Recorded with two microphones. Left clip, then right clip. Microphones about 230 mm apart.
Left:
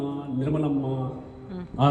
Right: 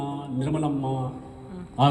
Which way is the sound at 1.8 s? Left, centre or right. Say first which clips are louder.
Right 1 dB; right.